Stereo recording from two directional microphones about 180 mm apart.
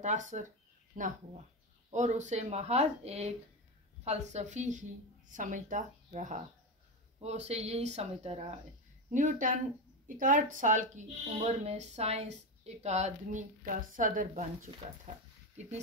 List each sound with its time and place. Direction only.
0.0 s speech: 40° right (ahead or behind)